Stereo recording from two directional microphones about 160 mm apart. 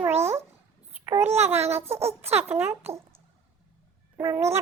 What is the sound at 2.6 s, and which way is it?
Speech, 15° right (ahead or behind).